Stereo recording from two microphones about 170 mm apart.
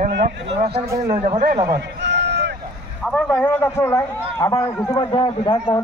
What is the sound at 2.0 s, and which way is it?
Run, 90° right.